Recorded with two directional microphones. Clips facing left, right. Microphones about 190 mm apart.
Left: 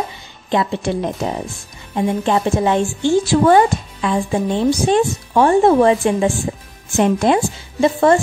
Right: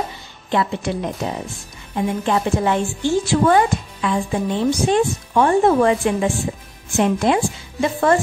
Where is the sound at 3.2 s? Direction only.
35° left (ahead or behind).